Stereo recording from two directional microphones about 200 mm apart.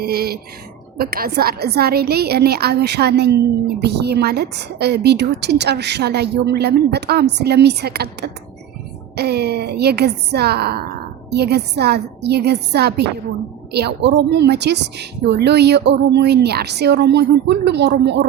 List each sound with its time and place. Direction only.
0.0 s a woman's voice: 50° right (ahead or behind)
9.1 s a woman's voice: 55° right (ahead or behind)